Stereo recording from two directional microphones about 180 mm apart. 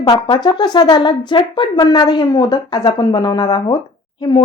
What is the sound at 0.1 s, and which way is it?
Speech, 25° left (ahead or behind).